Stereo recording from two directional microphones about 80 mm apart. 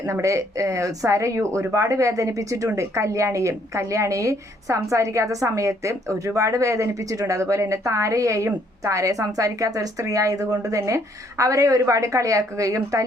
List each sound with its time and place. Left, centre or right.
0.0 s a woman's voice: right